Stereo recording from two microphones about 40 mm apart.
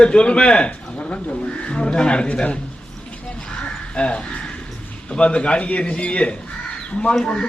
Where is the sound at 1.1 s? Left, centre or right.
Left.